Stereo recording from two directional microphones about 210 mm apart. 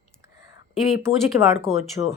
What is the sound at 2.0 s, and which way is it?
Speech, 15° right (ahead or behind).